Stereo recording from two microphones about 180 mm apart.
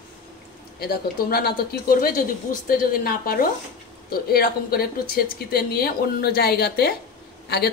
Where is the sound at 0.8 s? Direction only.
60° left (ahead or behind).